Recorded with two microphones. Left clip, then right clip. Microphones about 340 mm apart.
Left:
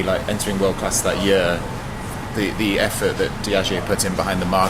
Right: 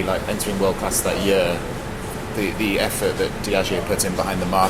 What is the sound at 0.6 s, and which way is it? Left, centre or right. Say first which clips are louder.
Speech: left 1 dB; left.